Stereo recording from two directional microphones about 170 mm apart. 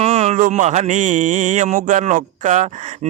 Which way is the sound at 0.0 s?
35° right (ahead or behind).